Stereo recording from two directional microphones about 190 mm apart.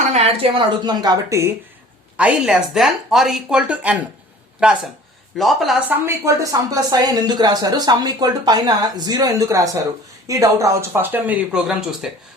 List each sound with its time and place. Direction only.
0.0 s speech: 35° right (ahead or behind); by 1.5 s 15° right (ahead or behind)
2.1 s speech: 5° right (ahead or behind)
5.4 s speech: centre (ahead or behind)
6.1 s speech: 15° right (ahead or behind)